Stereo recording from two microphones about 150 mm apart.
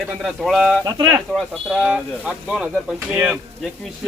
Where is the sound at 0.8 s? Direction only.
25° right (ahead or behind).